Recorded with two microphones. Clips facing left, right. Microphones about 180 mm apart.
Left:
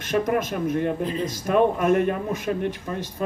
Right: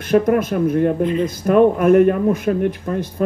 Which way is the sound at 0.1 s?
55° right (ahead or behind).